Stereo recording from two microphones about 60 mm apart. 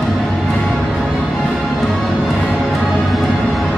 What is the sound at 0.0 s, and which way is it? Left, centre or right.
Music, centre.